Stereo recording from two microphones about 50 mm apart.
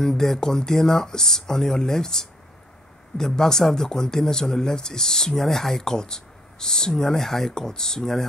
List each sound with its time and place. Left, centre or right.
0.0 s speech: centre